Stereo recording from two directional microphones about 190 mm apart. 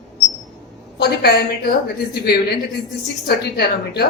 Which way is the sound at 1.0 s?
55° left (ahead or behind).